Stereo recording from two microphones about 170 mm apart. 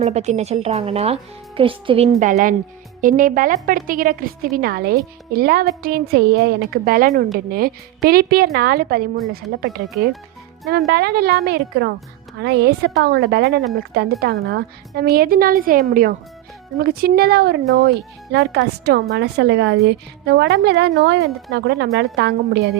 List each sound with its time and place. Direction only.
0.0 s speech: 40° right (ahead or behind)
2.2 s a woman's voice: 55° right (ahead or behind); by 22.7 s 70° right (ahead or behind)